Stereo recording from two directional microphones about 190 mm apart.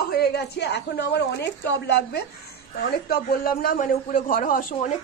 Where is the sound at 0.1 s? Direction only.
60° left (ahead or behind).